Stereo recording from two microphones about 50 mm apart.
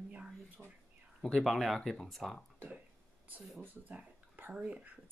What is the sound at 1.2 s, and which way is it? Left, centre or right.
Speech, centre.